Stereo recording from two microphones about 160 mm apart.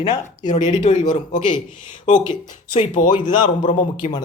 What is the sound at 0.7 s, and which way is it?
Speech, 40° left (ahead or behind).